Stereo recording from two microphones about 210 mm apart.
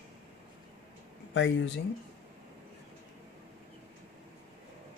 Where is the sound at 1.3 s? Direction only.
60° left (ahead or behind).